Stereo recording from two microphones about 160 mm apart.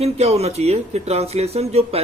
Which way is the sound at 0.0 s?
40° right (ahead or behind).